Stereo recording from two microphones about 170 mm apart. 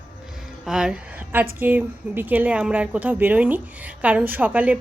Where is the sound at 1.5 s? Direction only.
10° right (ahead or behind).